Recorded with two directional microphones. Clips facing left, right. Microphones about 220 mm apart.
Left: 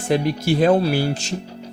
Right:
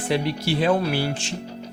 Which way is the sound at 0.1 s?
45° left (ahead or behind).